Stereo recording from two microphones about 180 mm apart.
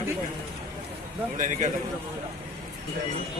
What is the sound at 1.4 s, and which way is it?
Speech, 45° right (ahead or behind).